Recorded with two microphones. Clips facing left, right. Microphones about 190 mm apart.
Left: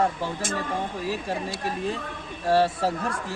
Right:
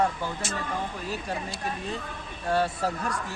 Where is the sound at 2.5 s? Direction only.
30° left (ahead or behind).